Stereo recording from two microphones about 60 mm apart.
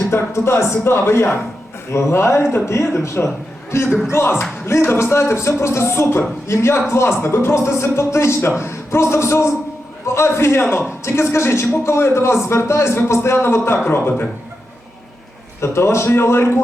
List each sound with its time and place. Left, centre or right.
0.1 s a man's voice: left
15.6 s a man's voice: left